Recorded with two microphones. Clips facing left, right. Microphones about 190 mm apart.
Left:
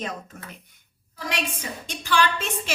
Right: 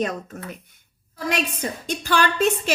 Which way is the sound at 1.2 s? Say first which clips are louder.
Right 5 dB; 40° right (ahead or behind).